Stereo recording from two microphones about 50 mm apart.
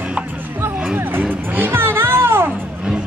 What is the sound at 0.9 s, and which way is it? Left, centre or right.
Music, right.